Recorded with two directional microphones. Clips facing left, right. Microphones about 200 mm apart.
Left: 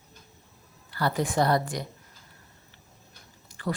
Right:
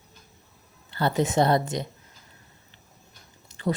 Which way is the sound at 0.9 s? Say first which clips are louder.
Right 3 dB; 25° right (ahead or behind).